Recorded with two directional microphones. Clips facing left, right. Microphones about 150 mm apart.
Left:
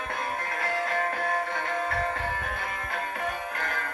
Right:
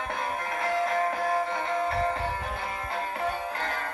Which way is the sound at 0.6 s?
25° right (ahead or behind).